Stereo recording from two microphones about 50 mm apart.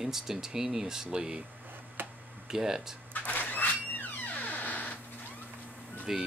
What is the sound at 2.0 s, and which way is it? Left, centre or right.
Tick-tock, right.